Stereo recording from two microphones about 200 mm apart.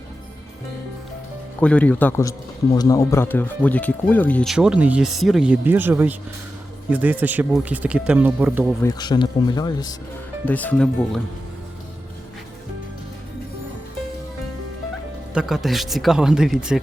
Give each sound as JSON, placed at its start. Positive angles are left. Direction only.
{"t": 1.6, "sound": "speech", "side_deg": 5}
{"t": 8.8, "sound": "speech", "side_deg": 20}
{"t": 10.4, "sound": "speech", "side_deg": 10}
{"t": 15.3, "sound": "speech", "side_deg": -5}